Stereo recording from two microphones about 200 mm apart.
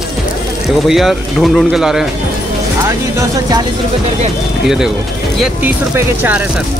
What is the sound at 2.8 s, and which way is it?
Speech, 20° right (ahead or behind).